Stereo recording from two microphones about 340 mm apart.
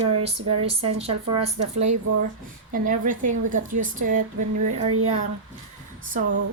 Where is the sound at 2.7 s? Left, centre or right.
Right.